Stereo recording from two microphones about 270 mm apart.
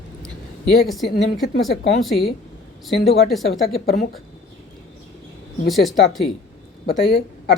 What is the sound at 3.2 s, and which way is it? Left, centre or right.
Speech, centre.